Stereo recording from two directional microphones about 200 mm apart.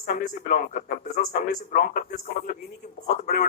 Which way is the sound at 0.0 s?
45° left (ahead or behind).